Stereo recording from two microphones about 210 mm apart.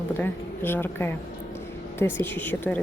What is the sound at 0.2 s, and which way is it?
Speech, 10° left (ahead or behind).